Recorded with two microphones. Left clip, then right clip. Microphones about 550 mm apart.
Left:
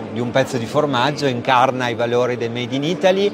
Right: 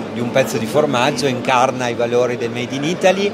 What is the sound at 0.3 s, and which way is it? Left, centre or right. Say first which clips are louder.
Speech: right 2 dB; left.